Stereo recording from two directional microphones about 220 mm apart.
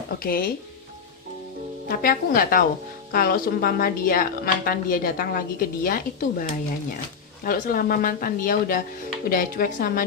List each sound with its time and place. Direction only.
0.2 s a woman's voice: 40° left (ahead or behind)
1.9 s a woman's voice: 40° left (ahead or behind)